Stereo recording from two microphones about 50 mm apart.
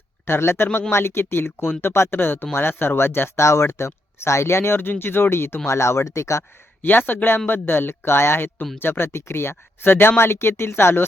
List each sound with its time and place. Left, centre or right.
0.3 s speech: left
2.1 s speech: left
5.6 s speech: left
6.8 s speech: left